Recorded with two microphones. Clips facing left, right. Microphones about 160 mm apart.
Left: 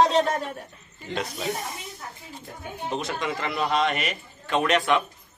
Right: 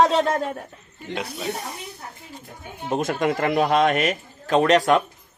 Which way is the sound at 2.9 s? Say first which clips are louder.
Right 8 dB; 50° right (ahead or behind).